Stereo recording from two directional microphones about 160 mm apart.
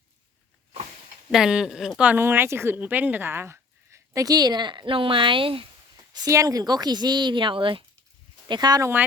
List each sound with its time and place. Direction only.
1.3 s speech: 5° right (ahead or behind); by 5.6 s 35° right (ahead or behind)
6.1 s speech: 20° right (ahead or behind)